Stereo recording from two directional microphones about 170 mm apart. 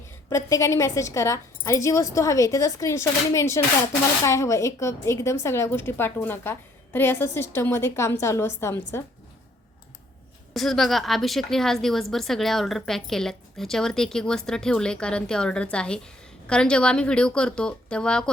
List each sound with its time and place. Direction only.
0.3 s a woman's voice: 20° left (ahead or behind)
10.5 s a woman's voice: centre (ahead or behind)